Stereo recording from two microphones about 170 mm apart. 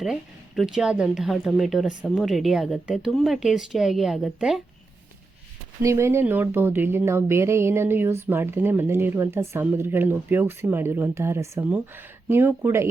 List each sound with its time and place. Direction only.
0.0 s speech: centre (ahead or behind)
5.8 s speech: 15° right (ahead or behind)